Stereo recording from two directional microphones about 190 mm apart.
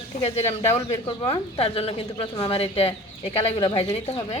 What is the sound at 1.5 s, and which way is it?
A woman's voice, 30° left (ahead or behind).